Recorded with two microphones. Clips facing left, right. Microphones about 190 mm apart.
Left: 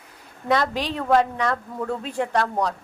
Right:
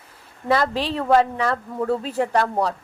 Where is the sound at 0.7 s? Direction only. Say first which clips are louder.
Right 2 dB; 30° right (ahead or behind).